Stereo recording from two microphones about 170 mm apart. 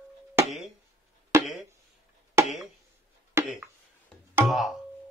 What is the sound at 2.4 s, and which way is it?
Chop, 15° right (ahead or behind).